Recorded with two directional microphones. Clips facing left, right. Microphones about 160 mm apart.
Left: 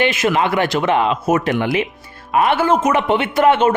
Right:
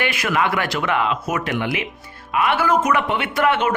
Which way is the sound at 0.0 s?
25° left (ahead or behind).